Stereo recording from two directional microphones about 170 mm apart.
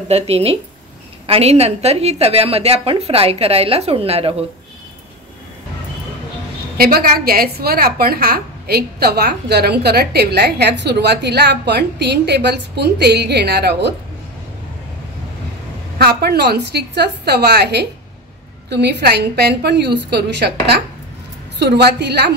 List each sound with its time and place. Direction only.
0.1 s a woman's voice: 35° right (ahead or behind)
6.8 s a woman's voice: 60° right (ahead or behind); by 13.9 s 80° right
16.0 s a woman's voice: 70° right (ahead or behind)
21.5 s a woman's voice: 85° right